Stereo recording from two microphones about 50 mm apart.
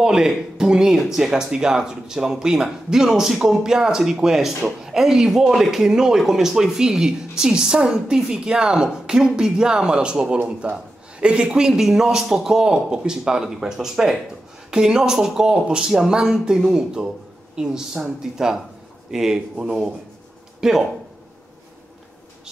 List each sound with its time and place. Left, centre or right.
0.0 s speech: centre